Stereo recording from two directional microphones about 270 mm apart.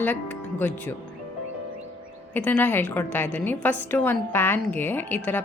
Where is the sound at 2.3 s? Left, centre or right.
Centre.